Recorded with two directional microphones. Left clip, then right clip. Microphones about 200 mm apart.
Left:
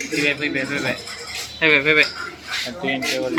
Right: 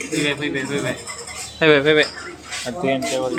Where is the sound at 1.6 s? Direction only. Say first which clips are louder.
Right 2 dB; 20° right (ahead or behind).